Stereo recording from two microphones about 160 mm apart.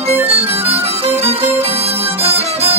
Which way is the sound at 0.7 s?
40° right (ahead or behind).